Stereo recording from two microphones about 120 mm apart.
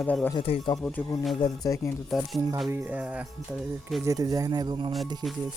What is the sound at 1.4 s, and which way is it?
Speech, 25° left (ahead or behind).